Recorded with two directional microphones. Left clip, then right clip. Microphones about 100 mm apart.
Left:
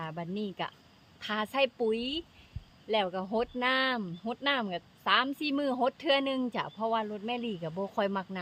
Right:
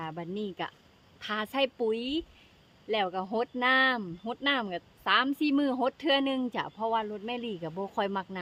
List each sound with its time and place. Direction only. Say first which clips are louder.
0.0 s speech: right 1 dB; 35° right (ahead or behind)